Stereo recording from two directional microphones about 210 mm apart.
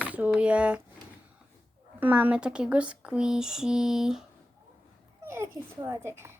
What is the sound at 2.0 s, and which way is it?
Speech, 5° right (ahead or behind).